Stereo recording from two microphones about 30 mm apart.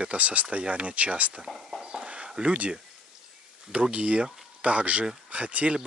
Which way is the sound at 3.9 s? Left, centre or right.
Right.